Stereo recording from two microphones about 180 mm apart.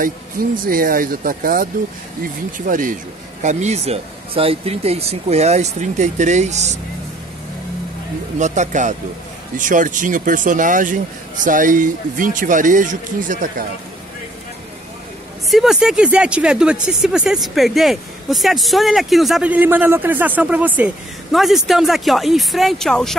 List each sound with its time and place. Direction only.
0.0 s speech: 50° right (ahead or behind)
8.4 s speech: 40° right (ahead or behind)
15.5 s speech: 5° right (ahead or behind)